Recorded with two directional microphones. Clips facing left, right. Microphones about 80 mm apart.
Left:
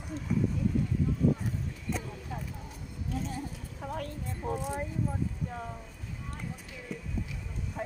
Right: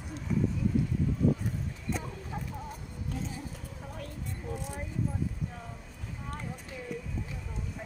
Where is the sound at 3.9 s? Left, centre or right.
Left.